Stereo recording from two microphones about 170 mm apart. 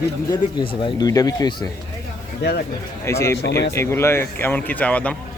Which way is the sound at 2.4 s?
80° left.